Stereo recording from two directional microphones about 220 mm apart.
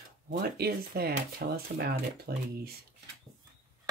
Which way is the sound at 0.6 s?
45° right (ahead or behind).